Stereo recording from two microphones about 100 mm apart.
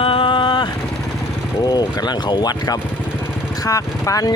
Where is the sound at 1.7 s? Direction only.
45° left (ahead or behind).